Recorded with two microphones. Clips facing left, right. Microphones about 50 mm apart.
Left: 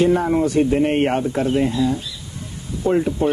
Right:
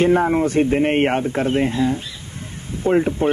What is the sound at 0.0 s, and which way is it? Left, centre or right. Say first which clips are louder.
Speech: right 1 dB; right.